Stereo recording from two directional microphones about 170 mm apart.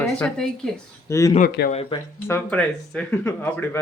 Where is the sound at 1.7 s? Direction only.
35° left (ahead or behind).